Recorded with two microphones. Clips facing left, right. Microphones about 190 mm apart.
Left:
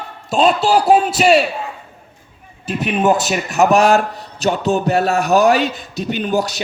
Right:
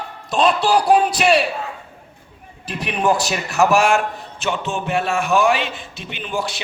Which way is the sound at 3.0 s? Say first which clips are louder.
Left 2 dB; 20° left (ahead or behind).